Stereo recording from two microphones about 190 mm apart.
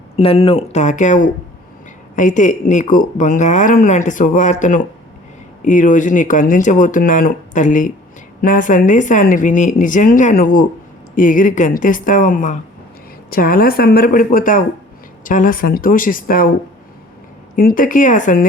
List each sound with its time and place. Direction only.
0.2 s speech: 30° left (ahead or behind); by 16.5 s 50° left (ahead or behind)
17.6 s speech: 45° left (ahead or behind)